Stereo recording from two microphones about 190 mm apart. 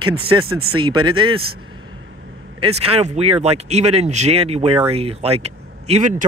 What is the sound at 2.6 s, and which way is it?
Speech, 30° right (ahead or behind).